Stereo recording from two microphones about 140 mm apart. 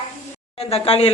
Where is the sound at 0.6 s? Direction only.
45° left (ahead or behind).